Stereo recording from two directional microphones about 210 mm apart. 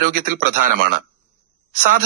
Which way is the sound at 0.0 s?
40° right (ahead or behind).